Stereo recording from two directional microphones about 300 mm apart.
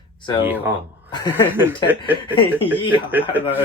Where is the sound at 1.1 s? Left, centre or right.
Centre.